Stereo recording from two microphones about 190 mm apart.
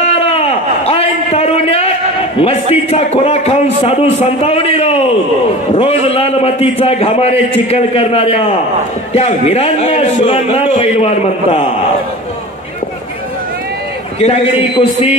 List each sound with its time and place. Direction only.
0.0 s a sound: 35° left (ahead or behind)
2.3 s a man's voice: 30° left (ahead or behind)
14.2 s a man's voice: 35° left (ahead or behind)